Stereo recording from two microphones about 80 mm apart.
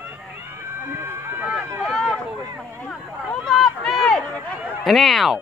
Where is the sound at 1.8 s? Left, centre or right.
Centre.